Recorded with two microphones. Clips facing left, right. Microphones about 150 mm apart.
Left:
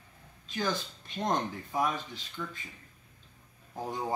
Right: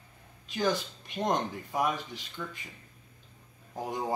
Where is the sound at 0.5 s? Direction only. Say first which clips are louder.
Right 3 dB; 15° right (ahead or behind).